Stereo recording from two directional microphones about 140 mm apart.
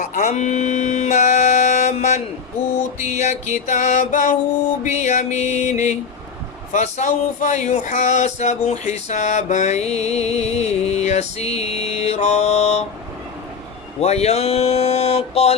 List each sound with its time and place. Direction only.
0.0 s speech: 65° left (ahead or behind)
3.1 s music: 55° left (ahead or behind)
6.7 s speech: 60° left (ahead or behind)
14.0 s speech: 50° left (ahead or behind)